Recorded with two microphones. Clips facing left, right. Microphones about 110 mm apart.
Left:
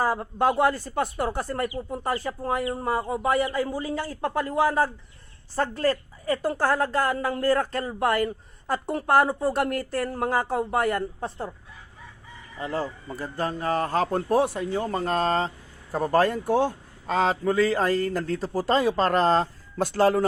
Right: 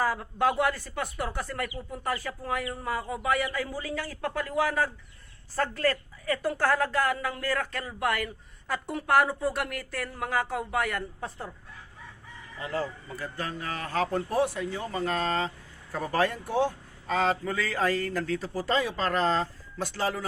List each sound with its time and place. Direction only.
0.0 s speech: 30° left (ahead or behind)
12.5 s speech: 30° left (ahead or behind)